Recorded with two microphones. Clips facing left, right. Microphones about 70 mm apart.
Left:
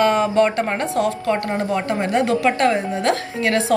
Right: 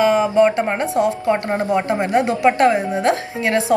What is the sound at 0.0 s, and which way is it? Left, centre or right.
Speech, centre.